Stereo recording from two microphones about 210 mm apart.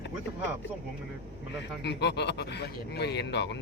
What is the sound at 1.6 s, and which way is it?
Speech, 55° left (ahead or behind).